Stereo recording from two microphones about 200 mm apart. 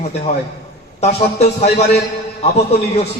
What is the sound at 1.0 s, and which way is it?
A man's voice, 35° left (ahead or behind).